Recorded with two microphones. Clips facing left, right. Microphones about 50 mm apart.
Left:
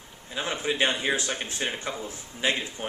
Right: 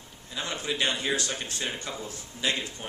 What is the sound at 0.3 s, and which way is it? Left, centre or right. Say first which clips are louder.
Speech: left 3 dB; centre.